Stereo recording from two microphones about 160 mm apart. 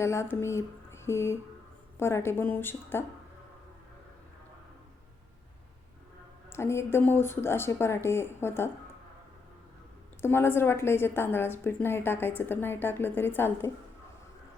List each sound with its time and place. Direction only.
0.0 s speech: 15° left (ahead or behind)
6.5 s speech: 15° left (ahead or behind)
10.2 s speech: 15° left (ahead or behind)